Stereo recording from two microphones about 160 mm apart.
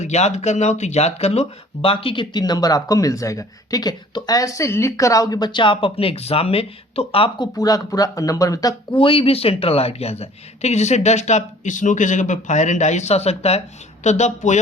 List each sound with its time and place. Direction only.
0.0 s speech: 45° left (ahead or behind)